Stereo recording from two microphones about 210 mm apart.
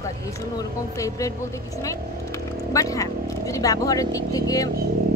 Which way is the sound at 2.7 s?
15° left (ahead or behind).